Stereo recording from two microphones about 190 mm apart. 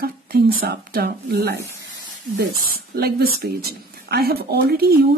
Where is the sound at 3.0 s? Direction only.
55° right (ahead or behind).